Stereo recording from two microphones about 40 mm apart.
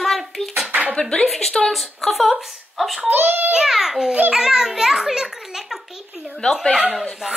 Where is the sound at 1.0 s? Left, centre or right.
Centre.